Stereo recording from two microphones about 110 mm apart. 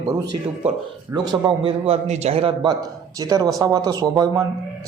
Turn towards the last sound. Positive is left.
turn(degrees=-30)  # may be behind; listen again after turning